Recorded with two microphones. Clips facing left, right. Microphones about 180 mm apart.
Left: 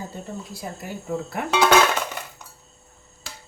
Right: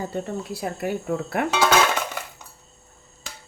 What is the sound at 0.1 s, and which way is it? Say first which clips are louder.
Speech: right 6 dB; 65° right (ahead or behind).